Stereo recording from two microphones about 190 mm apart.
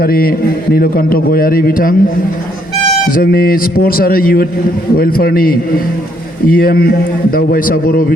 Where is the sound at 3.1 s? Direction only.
50° left (ahead or behind).